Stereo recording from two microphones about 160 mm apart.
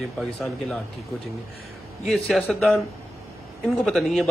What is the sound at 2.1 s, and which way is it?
A man's voice, centre (ahead or behind).